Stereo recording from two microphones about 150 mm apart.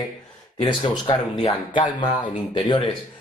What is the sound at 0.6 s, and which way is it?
Speech, 30° left (ahead or behind).